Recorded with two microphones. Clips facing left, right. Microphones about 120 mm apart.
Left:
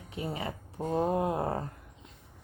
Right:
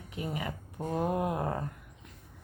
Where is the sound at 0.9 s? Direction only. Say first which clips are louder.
Left 2 dB; 25° left (ahead or behind).